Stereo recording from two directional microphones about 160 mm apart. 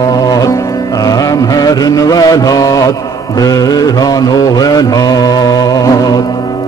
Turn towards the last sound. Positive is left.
turn(degrees=25)  # may be behind; listen again after turning